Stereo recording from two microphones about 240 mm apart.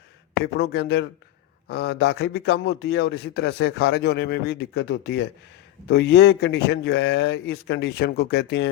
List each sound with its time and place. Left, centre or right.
0.4 s speech: left